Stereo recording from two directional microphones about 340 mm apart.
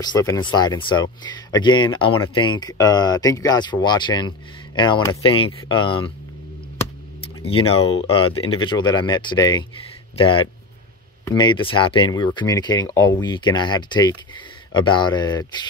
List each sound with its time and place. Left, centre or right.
0.0 s speech: centre
7.2 s a sound: centre
7.6 s speech: left
8.6 s speech: centre